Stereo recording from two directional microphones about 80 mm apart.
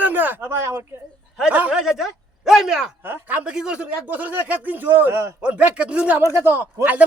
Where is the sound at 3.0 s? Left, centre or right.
Right.